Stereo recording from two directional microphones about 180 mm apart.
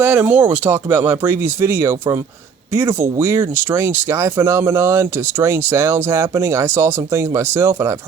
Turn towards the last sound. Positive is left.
turn(degrees=-15)  # may be behind; listen again after turning